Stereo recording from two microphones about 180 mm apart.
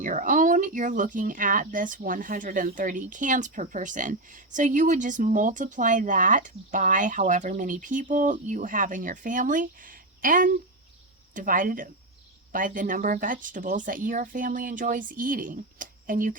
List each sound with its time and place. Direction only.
0.0 s speech: 45° right (ahead or behind)